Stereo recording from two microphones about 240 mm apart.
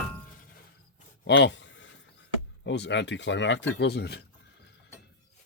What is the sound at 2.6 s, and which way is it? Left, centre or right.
Speech, left.